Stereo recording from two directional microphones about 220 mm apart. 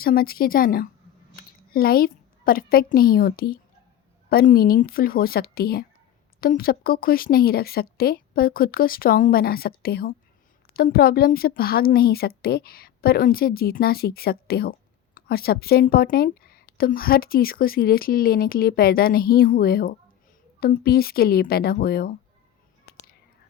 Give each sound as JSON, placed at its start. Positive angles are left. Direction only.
{"t": 0.0, "sound": "a woman's voice", "side_deg": 40}